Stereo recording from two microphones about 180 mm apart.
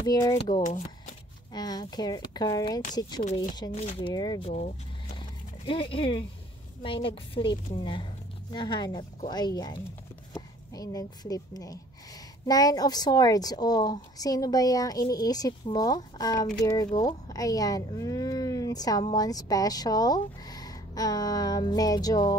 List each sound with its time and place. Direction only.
0.0 s speech: 20° left (ahead or behind)
0.4 s speech: 35° left (ahead or behind)
1.5 s speech: 20° left (ahead or behind)
3.7 s speech: 35° left (ahead or behind)
5.7 s speech: 30° left (ahead or behind)